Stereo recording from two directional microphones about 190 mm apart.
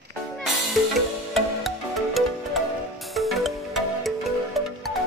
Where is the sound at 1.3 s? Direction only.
Centre (ahead or behind).